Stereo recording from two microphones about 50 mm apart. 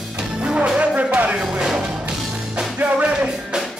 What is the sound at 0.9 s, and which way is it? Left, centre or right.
Speech, right.